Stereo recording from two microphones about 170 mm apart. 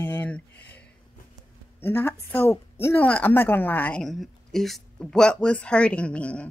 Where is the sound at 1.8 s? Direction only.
15° left (ahead or behind).